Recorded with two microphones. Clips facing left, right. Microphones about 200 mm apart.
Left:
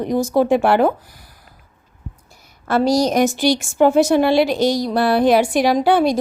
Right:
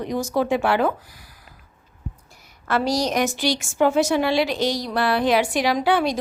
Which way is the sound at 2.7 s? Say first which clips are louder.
Left 6 dB; 45° left (ahead or behind).